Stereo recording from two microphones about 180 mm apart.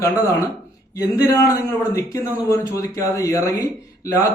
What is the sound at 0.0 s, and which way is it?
Speech, 15° left (ahead or behind).